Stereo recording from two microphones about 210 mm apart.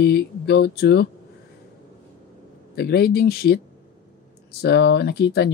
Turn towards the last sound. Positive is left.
turn(degrees=50)  # may be behind; listen again after turning